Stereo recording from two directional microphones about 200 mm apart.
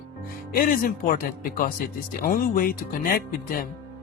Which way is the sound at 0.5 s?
45° left (ahead or behind).